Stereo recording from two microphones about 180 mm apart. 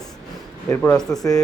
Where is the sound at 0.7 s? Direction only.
10° left (ahead or behind).